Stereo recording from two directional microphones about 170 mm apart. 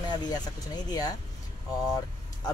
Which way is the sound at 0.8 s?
20° left (ahead or behind).